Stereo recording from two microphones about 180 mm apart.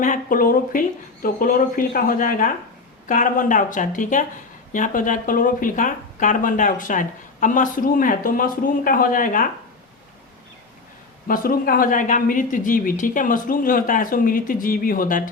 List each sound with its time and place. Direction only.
0.0 s speech: 45° left (ahead or behind)
11.3 s speech: 55° left (ahead or behind)